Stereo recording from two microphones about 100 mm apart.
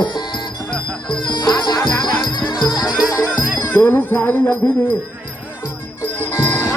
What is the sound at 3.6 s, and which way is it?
Speech, 25° left (ahead or behind).